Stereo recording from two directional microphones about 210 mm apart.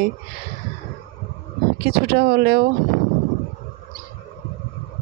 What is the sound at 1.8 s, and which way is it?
Speech, 45° right (ahead or behind).